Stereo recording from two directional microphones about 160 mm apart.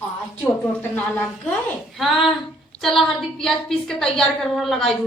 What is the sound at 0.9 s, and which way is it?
A woman's voice, 10° left (ahead or behind).